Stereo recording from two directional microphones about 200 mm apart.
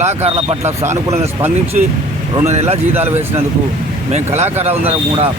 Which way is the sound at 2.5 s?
30° right (ahead or behind).